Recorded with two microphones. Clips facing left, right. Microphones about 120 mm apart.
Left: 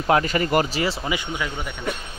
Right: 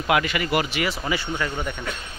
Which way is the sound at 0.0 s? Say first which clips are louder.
Left 3 dB; 35° left (ahead or behind).